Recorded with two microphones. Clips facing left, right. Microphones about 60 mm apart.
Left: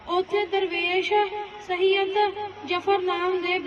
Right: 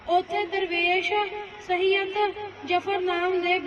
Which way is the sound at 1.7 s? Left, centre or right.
Right.